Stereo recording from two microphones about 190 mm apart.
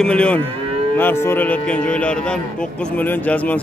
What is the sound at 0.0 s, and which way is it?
A man's voice, 5° left (ahead or behind).